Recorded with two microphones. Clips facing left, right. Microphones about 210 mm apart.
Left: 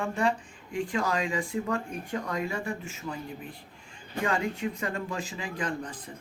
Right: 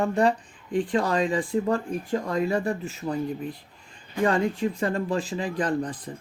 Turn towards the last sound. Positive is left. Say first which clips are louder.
# right 7 dB
turn(degrees=-35)  # may be behind; listen again after turning